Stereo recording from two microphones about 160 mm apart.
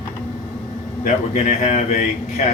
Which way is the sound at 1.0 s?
45° left (ahead or behind).